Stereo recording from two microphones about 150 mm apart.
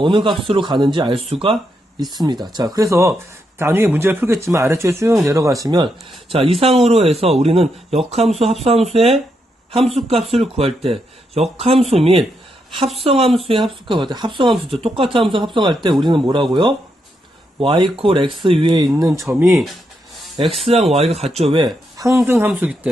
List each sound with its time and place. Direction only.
0.0 s speech: 30° right (ahead or behind)
20.7 s speech: 40° right (ahead or behind); by 22.9 s 10° right (ahead or behind)